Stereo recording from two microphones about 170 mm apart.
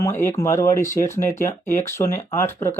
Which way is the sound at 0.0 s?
15° left (ahead or behind).